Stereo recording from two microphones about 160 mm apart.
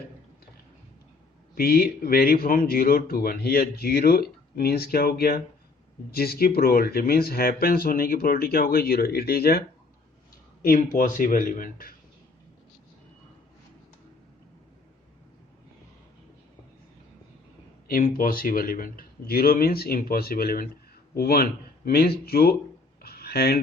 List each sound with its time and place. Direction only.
1.5 s speech: 75° left (ahead or behind)
10.6 s speech: 60° left (ahead or behind)
17.8 s speech: 60° left (ahead or behind)
23.0 s a sound: 75° left (ahead or behind)